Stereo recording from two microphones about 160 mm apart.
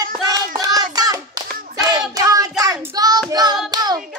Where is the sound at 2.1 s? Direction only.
20° right (ahead or behind).